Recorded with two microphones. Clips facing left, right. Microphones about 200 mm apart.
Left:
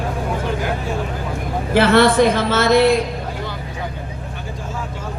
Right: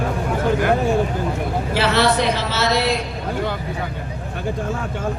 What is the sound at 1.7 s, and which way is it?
A woman's voice, 55° left (ahead or behind).